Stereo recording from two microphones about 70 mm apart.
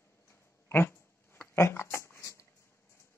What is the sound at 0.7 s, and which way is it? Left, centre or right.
Dog, left.